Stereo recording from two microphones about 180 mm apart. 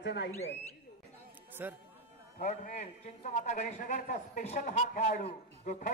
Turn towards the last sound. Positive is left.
turn(degrees=45)  # may be behind; listen again after turning